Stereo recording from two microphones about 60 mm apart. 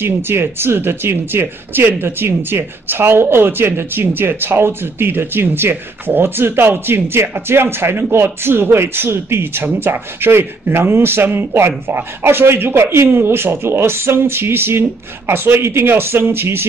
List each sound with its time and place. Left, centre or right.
0.0 s speech: right